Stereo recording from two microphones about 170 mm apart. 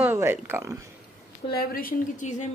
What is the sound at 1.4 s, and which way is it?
Speech, 60° left (ahead or behind).